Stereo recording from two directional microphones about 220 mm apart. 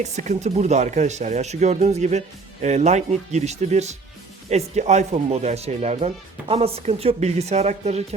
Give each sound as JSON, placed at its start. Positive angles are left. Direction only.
{"t": 0.0, "sound": "speech", "side_deg": -30}